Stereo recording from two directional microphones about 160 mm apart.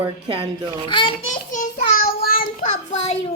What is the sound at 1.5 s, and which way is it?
Child singing, 60° left (ahead or behind).